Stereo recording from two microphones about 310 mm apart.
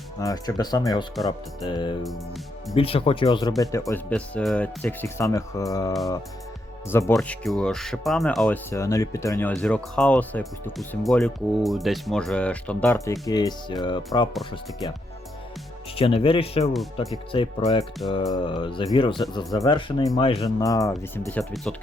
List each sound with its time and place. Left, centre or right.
0.2 s speech: centre
6.9 s speech: centre
16.0 s speech: centre
16.7 s speech: centre
17.3 s speech: centre